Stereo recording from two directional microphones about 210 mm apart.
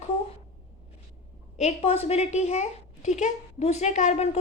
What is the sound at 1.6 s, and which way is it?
A woman's voice, 30° left (ahead or behind).